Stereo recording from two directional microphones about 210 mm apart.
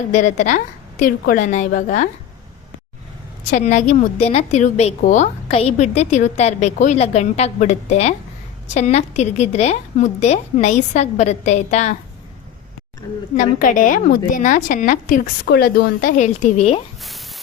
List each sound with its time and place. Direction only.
0.1 s a woman's voice: 35° left (ahead or behind)
3.5 s a woman's voice: 35° left (ahead or behind)
13.3 s a woman's voice: 40° left (ahead or behind)
15.4 s a woman's voice: 50° left (ahead or behind); by 16.8 s 30° left (ahead or behind)
17.0 s a sound: centre (ahead or behind)